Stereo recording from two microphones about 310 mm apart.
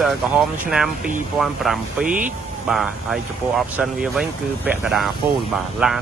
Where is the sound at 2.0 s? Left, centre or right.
Right.